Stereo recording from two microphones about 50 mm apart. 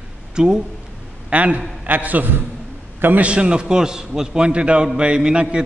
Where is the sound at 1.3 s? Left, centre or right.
Right.